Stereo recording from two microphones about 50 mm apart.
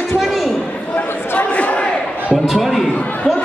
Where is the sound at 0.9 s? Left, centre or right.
Left.